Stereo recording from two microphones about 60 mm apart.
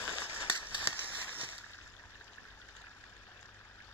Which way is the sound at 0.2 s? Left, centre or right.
Left.